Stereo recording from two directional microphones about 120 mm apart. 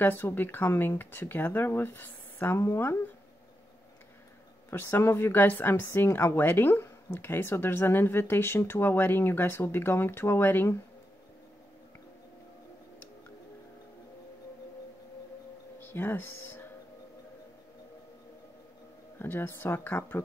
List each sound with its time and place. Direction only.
0.0 s a woman's voice: 15° left (ahead or behind)
4.6 s a woman's voice: 20° left (ahead or behind)
15.8 s speech: 15° left (ahead or behind)
19.1 s speech: 15° left (ahead or behind)